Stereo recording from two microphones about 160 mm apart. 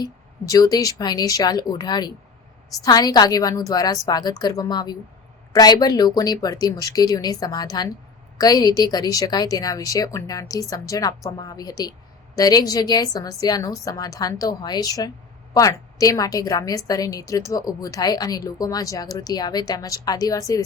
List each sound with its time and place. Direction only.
0.0 s a woman's voice: 20° left (ahead or behind)